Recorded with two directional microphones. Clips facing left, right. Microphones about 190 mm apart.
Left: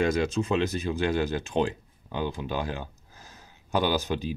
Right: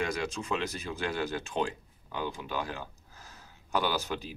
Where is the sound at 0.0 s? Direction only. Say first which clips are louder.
Left 8 dB; 25° left (ahead or behind).